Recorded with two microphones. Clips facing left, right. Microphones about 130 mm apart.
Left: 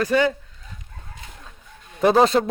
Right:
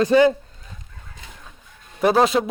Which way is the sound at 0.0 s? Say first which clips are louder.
Right 5 dB; 25° right (ahead or behind).